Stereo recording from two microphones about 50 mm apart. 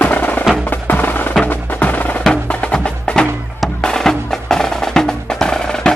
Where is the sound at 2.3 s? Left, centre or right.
Left.